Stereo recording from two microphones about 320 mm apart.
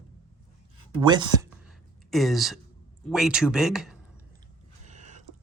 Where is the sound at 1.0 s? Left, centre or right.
Centre.